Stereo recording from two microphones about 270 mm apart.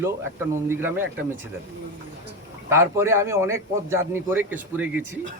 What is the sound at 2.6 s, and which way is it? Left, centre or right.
Speech, centre.